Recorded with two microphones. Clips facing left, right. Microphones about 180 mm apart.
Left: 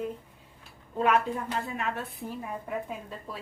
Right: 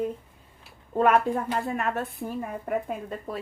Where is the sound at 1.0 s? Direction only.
50° right (ahead or behind).